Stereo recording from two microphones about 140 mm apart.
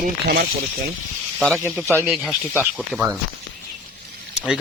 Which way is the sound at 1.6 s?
15° right (ahead or behind).